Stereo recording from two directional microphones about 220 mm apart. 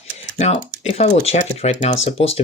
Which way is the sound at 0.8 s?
30° left (ahead or behind).